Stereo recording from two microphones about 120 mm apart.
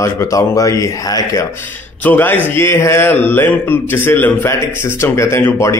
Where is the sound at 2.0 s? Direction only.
15° left (ahead or behind).